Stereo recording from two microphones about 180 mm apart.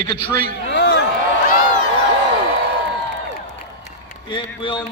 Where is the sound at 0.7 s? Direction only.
75° left (ahead or behind).